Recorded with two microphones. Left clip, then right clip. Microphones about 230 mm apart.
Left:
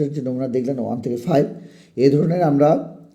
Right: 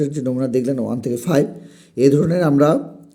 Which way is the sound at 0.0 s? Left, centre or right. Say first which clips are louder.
Right 2 dB; right.